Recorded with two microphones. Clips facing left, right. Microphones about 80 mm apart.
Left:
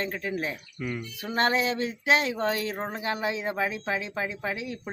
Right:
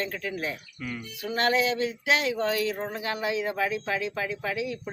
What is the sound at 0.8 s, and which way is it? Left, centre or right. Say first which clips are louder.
Speech: left 3 dB; centre.